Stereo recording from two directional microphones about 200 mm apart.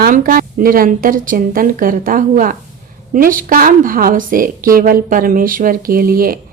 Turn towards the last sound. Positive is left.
turn(degrees=-45)  # may be behind; listen again after turning